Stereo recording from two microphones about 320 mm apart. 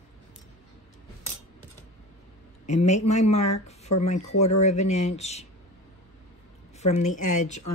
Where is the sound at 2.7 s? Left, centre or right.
Left.